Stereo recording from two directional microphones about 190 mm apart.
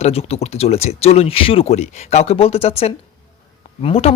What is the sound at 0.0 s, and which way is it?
Speech, 30° left (ahead or behind).